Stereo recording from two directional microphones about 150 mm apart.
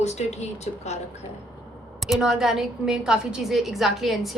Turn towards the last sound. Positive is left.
turn(degrees=0)  # may be behind; listen again after turning